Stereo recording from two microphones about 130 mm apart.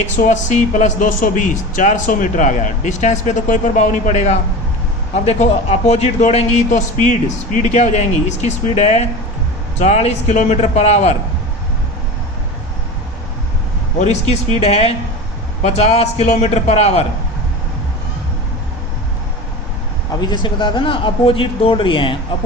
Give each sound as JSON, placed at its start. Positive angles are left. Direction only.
{"t": 0.0, "sound": "a man's voice", "side_deg": 65}
{"t": 14.0, "sound": "a man's voice", "side_deg": 55}
{"t": 20.1, "sound": "speech", "side_deg": 35}